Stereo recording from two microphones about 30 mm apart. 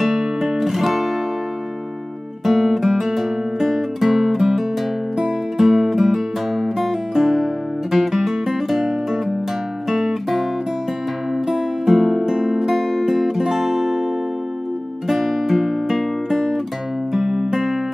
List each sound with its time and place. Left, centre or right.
0.4 s guitar: centre
2.4 s guitar: centre
5.6 s music: centre
11.8 s music: centre
15.0 s music: centre
17.2 s music: right